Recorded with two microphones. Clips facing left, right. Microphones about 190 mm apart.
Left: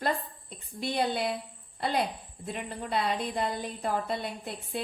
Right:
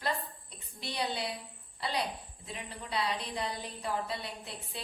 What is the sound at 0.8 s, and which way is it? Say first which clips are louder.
A woman's voice: left 7 dB; 50° left (ahead or behind).